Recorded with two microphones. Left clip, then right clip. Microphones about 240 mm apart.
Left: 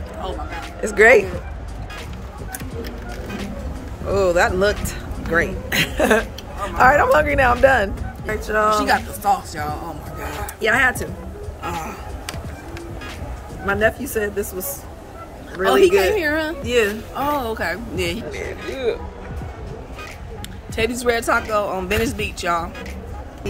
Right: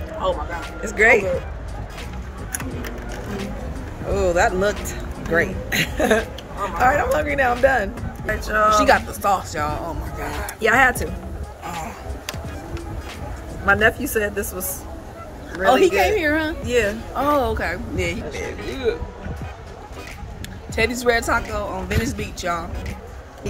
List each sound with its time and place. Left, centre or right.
0.8 s speech: centre
4.1 s speech: centre
13.7 s speech: centre
15.6 s speech: centre
20.7 s speech: centre